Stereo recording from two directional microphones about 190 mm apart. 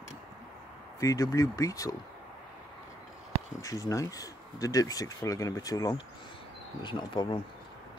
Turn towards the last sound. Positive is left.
turn(degrees=25)  # may be behind; listen again after turning